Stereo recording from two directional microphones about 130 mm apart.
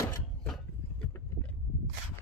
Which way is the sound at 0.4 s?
5° left (ahead or behind).